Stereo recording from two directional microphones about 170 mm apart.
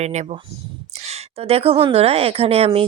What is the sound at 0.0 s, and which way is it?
A woman's voice, 40° right (ahead or behind).